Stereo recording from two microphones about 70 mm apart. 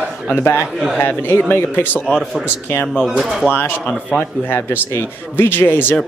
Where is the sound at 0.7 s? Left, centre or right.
Centre.